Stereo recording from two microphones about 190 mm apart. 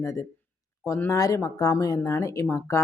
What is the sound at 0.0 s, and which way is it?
Speech, 15° left (ahead or behind).